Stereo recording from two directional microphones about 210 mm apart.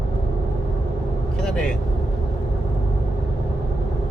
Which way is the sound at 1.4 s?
5° left (ahead or behind).